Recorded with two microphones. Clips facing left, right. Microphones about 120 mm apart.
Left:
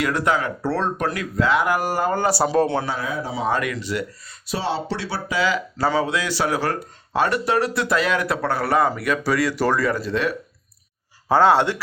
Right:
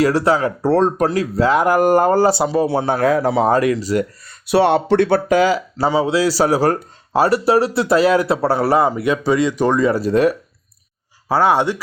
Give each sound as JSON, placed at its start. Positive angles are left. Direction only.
{"t": 0.0, "sound": "speech", "side_deg": -35}
{"t": 2.6, "sound": "speech", "side_deg": -10}
{"t": 3.0, "sound": "speech", "side_deg": -85}
{"t": 3.4, "sound": "speech", "side_deg": -35}
{"t": 4.3, "sound": "speech", "side_deg": -65}
{"t": 6.1, "sound": "speech", "side_deg": -35}
{"t": 9.9, "sound": "speech", "side_deg": -40}
{"t": 11.3, "sound": "speech", "side_deg": -10}